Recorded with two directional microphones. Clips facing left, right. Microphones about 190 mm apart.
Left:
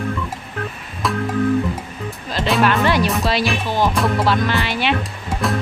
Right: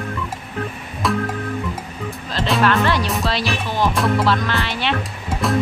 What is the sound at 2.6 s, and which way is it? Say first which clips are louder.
Speech: left 1 dB; 15° left (ahead or behind).